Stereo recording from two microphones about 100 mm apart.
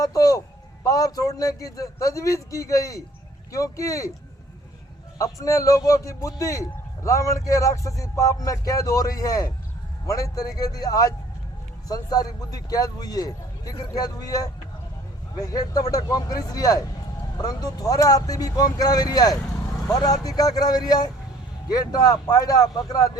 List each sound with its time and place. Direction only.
0.0 s a man's voice: 35° left (ahead or behind)
5.1 s a man's voice: 35° left (ahead or behind)